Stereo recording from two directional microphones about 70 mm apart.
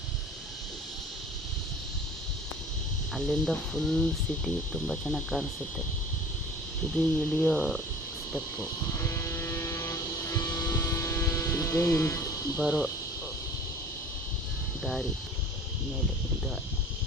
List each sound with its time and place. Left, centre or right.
3.2 s speech: centre
6.9 s speech: centre
9.0 s vehicle: left
11.1 s music: left
12.5 s speech: centre